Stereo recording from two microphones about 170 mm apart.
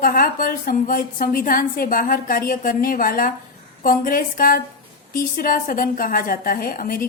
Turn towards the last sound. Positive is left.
turn(degrees=55)  # may be behind; listen again after turning